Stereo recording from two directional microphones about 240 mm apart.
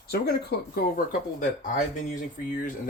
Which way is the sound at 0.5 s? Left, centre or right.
Left.